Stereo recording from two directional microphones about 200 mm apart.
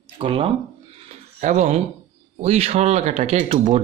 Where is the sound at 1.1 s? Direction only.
35° right (ahead or behind).